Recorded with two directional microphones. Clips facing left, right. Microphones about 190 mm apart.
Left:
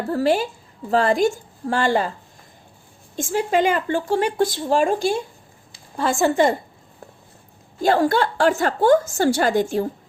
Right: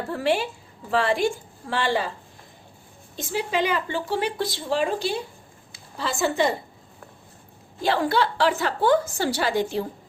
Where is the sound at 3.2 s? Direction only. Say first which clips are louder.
Left 5 dB; 50° left (ahead or behind).